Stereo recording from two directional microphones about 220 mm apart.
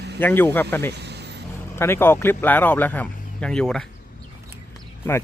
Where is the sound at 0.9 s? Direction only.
50° right (ahead or behind).